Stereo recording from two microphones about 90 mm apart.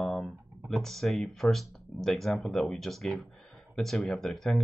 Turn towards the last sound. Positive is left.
turn(degrees=0)  # may be behind; listen again after turning